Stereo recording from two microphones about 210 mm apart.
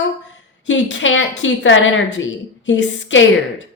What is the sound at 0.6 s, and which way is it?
A woman's voice, 60° left (ahead or behind).